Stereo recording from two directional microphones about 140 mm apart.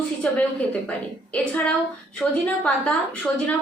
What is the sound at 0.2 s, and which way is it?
Speech, 10° left (ahead or behind).